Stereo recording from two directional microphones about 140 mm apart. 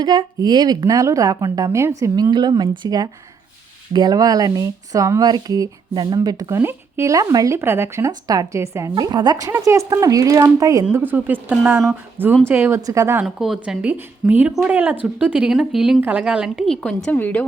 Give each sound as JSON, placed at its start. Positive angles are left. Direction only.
{"t": 0.0, "sound": "speech", "side_deg": -30}
{"t": 10.9, "sound": "speech", "side_deg": -15}
{"t": 11.5, "sound": "a woman's voice", "side_deg": 0}
{"t": 11.9, "sound": "speech", "side_deg": -15}
{"t": 13.2, "sound": "a woman's voice", "side_deg": -5}